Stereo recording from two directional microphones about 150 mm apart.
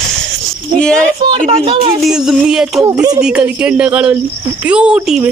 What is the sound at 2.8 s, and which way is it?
Speech, 25° right (ahead or behind).